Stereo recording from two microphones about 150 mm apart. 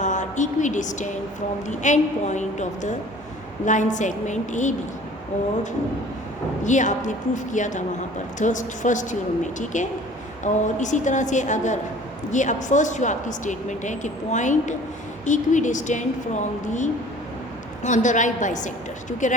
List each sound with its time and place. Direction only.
0.0 s a woman's voice: 55° left (ahead or behind)
6.7 s speech: 55° left (ahead or behind)